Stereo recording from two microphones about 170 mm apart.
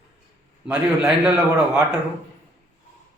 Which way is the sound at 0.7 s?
5° right (ahead or behind).